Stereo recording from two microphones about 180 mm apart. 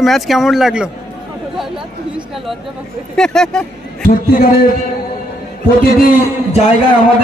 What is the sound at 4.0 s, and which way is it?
Speech, 55° left (ahead or behind).